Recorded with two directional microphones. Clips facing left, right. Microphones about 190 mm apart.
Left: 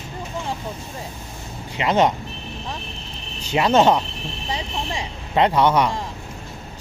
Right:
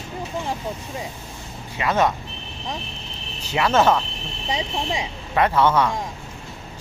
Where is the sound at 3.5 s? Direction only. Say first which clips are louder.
Left 2 dB; 20° left (ahead or behind).